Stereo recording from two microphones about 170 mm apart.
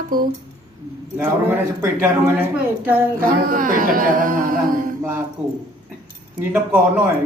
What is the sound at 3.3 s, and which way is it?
A woman's voice, 55° right (ahead or behind).